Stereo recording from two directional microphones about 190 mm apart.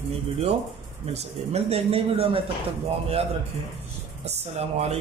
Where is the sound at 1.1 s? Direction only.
30° right (ahead or behind).